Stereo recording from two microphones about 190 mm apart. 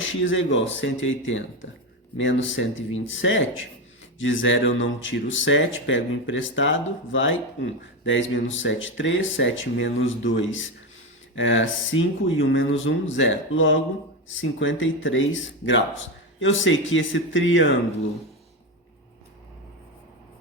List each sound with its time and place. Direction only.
0.0 s speech: 90° left